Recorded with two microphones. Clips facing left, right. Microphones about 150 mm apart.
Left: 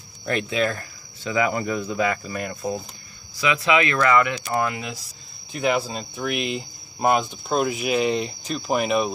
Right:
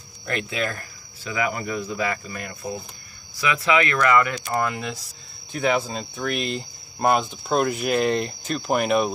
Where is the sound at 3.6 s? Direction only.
20° left (ahead or behind).